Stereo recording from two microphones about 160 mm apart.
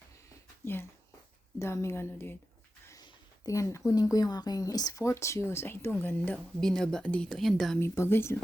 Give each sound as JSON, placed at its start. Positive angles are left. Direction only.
{"t": 0.6, "sound": "speech", "side_deg": 15}
{"t": 7.8, "sound": "speech", "side_deg": 15}